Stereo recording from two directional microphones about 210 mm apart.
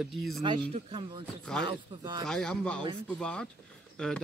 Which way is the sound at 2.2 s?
5° left (ahead or behind).